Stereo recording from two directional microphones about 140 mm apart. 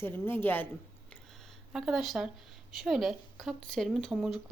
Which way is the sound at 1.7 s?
Centre (ahead or behind).